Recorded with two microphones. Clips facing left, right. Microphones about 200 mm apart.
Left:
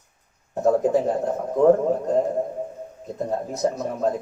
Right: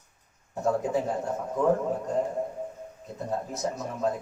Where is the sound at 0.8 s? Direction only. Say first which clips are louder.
Left 7 dB; 40° left (ahead or behind).